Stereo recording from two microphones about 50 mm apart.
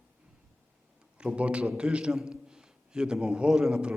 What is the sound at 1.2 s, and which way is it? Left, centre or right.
A man's voice, right.